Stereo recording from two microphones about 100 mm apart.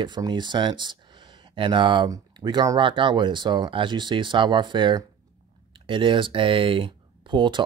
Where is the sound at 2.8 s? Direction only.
55° right (ahead or behind).